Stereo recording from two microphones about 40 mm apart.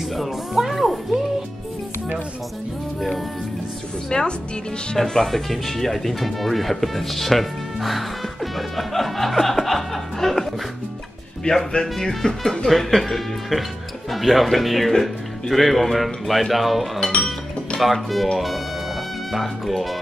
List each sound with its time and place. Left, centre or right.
0.1 s music: centre
3.0 s music: centre
4.1 s a woman's voice: left
11.5 s a woman's voice: left
11.9 s speech: centre
19.3 s speech: centre